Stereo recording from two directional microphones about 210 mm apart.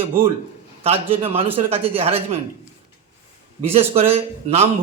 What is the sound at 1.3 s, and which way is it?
Speech, 10° right (ahead or behind).